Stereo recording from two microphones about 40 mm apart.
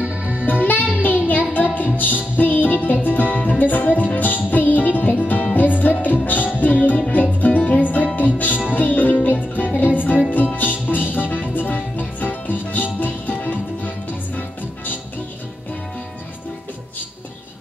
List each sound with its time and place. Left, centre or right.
0.0 s music: right
0.5 s music: left